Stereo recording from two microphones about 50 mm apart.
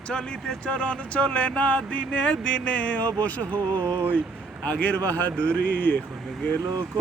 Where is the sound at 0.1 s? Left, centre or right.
Centre; by 3.6 s left.